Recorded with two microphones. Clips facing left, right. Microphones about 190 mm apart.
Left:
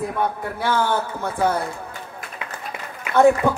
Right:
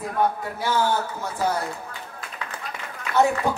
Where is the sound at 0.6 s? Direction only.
60° left (ahead or behind).